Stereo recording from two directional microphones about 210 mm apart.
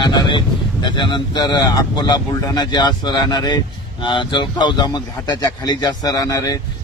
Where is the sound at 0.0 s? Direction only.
20° left (ahead or behind).